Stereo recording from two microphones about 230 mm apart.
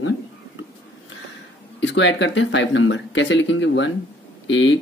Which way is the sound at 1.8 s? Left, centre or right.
Left.